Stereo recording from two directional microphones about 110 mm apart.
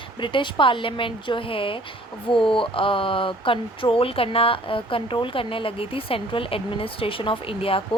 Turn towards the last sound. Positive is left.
turn(degrees=55)  # may be behind; listen again after turning